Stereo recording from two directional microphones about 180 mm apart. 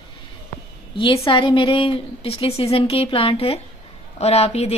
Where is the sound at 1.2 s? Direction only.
30° left (ahead or behind).